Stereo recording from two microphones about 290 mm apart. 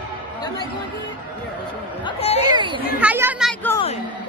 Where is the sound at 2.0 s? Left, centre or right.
Left.